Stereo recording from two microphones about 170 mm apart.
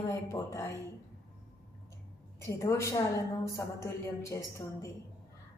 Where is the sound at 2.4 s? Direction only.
15° left (ahead or behind).